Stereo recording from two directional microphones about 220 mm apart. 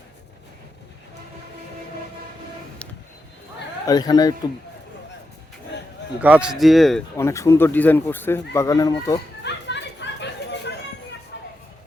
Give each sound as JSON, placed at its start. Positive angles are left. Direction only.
{"t": 2.8, "sound": "a sound", "side_deg": 5}
{"t": 3.8, "sound": "speech", "side_deg": 15}
{"t": 6.2, "sound": "speech", "side_deg": -5}
{"t": 7.2, "sound": "speech", "side_deg": 10}
{"t": 9.4, "sound": "chatter", "side_deg": 50}